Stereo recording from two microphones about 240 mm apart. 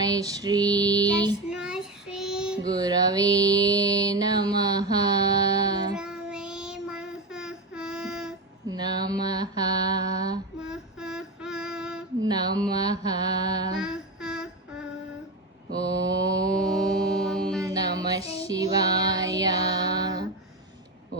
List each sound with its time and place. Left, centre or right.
0.0 s female singing: centre
1.5 s child singing: centre
2.6 s music: centre
6.0 s child singing: centre
8.6 s mantra: centre
10.6 s female singing: centre
12.2 s mantra: centre
13.8 s a sound: centre
16.2 s mantra: centre
17.2 s mantra: centre
17.6 s child singing: centre